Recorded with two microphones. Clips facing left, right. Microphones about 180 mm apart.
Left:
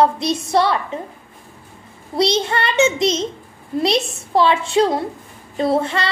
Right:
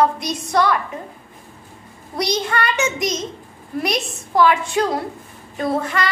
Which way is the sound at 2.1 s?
25° left (ahead or behind).